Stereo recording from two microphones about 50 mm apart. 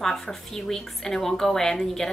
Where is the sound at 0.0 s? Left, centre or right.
Centre.